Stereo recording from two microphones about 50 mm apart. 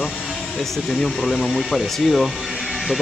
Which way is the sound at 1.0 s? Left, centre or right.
Centre.